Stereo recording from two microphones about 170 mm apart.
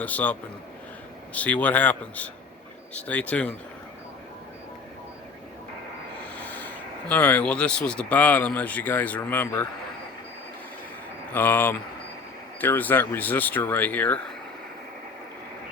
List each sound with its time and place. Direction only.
0.0 s speech: 10° left (ahead or behind)
6.3 s speech: 10° left (ahead or behind)
11.3 s speech: 10° left (ahead or behind)